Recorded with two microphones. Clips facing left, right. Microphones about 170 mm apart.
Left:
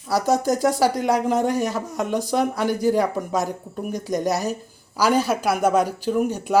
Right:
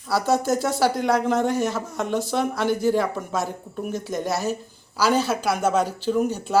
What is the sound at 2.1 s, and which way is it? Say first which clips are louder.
Speech: left 2 dB; 15° left (ahead or behind).